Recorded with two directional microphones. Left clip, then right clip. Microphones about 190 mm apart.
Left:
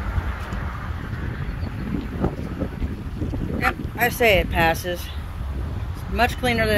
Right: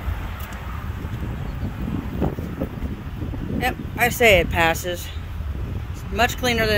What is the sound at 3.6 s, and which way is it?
Speech, 15° right (ahead or behind).